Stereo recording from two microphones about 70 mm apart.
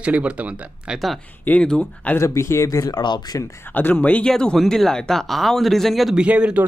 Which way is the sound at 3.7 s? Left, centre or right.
Left.